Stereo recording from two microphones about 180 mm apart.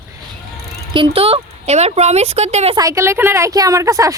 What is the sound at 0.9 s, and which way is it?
A woman's voice, 30° right (ahead or behind).